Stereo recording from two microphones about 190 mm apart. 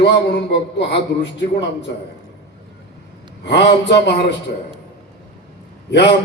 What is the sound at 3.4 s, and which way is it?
Speech, 65° left (ahead or behind).